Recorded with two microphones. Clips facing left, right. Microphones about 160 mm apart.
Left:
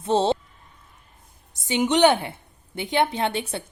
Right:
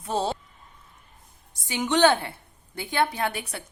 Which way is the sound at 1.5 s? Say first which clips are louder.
Left 3 dB; 20° left (ahead or behind).